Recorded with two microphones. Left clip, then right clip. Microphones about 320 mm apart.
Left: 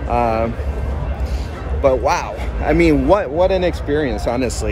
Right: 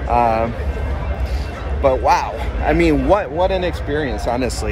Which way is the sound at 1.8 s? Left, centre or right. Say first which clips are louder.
Right 1 dB; centre.